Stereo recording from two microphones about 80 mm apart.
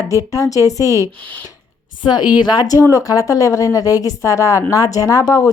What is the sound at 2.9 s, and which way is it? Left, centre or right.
A woman's voice, left.